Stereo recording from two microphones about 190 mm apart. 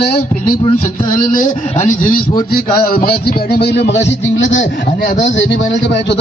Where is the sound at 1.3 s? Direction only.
40° left (ahead or behind).